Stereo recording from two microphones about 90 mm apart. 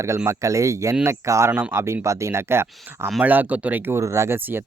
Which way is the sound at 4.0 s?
30° right (ahead or behind).